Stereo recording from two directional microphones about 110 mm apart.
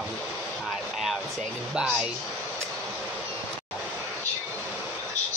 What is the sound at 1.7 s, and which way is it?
Speech, 5° right (ahead or behind).